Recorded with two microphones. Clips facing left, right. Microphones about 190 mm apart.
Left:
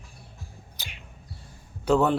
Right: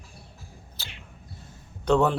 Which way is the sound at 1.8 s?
5° left (ahead or behind).